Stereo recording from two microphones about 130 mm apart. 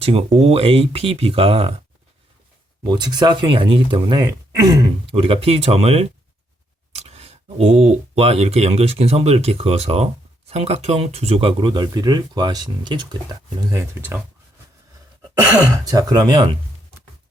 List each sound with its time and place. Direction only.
0.0 s speech: 45° right (ahead or behind)
2.8 s speech: 35° right (ahead or behind)
13.9 s speech: 15° right (ahead or behind)
15.4 s speech: 25° right (ahead or behind)